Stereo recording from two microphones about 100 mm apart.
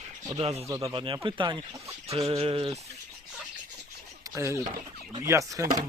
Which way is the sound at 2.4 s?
65° right (ahead or behind).